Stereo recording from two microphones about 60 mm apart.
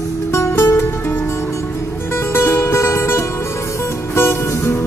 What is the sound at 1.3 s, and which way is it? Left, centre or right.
Music, left.